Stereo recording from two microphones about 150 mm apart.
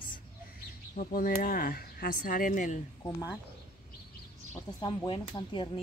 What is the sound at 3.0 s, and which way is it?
Speech, 25° left (ahead or behind).